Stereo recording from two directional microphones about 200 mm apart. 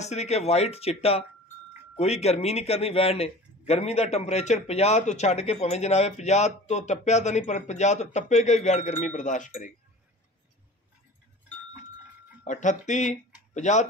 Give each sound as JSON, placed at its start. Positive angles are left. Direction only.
{"t": 0.0, "sound": "a man's voice", "side_deg": 35}
{"t": 12.4, "sound": "a man's voice", "side_deg": 40}